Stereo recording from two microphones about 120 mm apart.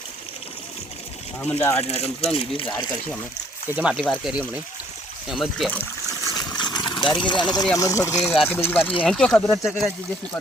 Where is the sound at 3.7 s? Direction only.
10° right (ahead or behind).